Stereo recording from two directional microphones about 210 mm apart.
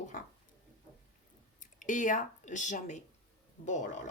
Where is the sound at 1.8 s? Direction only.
40° left (ahead or behind).